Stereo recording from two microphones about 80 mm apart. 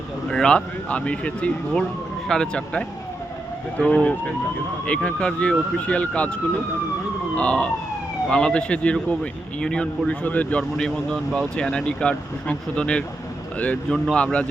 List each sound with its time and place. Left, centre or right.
0.3 s speech: centre
7.3 s speech: centre